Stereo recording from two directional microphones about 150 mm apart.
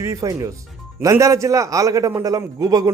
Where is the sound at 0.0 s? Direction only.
20° right (ahead or behind).